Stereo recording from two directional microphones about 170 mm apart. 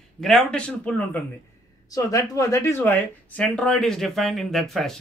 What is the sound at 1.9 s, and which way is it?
Speech, 20° left (ahead or behind).